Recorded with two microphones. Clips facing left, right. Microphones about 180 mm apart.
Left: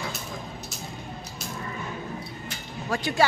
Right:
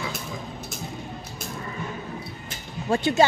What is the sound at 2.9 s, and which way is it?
Speech, 25° right (ahead or behind).